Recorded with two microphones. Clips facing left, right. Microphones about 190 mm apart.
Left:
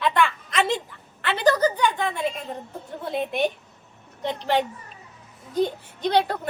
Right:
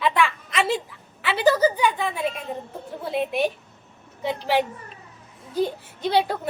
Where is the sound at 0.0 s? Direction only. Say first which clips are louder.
Even; centre (ahead or behind).